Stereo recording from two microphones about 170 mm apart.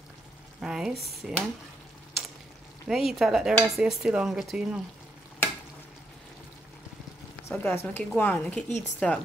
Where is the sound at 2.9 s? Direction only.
Centre (ahead or behind).